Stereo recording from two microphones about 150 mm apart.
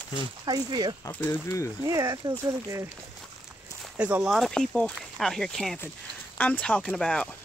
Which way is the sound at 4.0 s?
10° right (ahead or behind).